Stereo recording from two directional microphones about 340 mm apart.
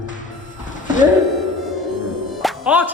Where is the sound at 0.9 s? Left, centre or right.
Left.